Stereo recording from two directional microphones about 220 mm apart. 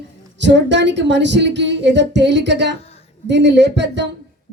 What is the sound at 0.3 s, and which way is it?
Speech, 55° right (ahead or behind).